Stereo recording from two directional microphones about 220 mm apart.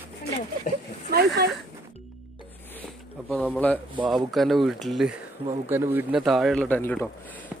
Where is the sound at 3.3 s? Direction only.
5° left (ahead or behind).